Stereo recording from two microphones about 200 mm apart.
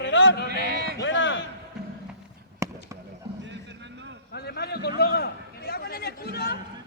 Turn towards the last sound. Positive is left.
turn(degrees=50)  # may be behind; listen again after turning